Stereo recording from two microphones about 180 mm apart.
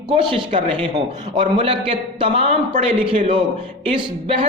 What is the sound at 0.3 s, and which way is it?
A man's voice, 25° right (ahead or behind).